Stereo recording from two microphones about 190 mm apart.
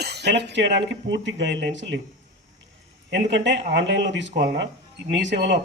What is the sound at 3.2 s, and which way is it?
Speech, 70° right (ahead or behind).